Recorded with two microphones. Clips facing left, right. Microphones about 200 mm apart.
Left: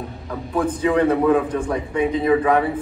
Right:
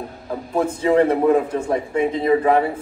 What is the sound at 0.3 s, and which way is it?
A man's voice, 25° right (ahead or behind).